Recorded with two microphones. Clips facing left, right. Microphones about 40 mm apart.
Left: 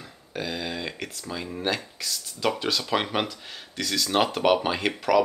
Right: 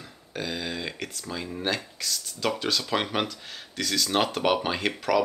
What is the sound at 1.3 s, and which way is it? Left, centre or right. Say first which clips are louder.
Speech: left 1 dB; centre.